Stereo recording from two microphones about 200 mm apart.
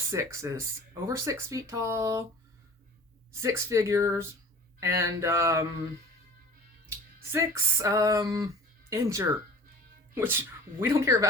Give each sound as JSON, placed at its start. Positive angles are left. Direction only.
{"t": 0.1, "sound": "speech", "side_deg": -15}
{"t": 3.4, "sound": "speech", "side_deg": -15}
{"t": 7.3, "sound": "speech", "side_deg": -15}